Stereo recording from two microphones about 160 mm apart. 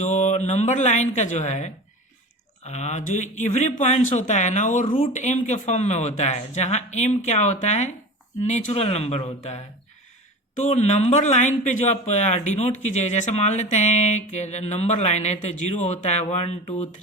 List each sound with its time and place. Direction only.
0.0 s speech: 50° left (ahead or behind)